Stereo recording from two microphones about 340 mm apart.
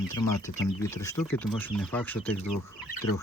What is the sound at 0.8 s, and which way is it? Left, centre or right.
Speech, centre.